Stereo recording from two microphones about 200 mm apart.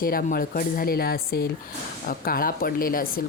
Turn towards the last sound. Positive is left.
turn(degrees=45)  # may be behind; listen again after turning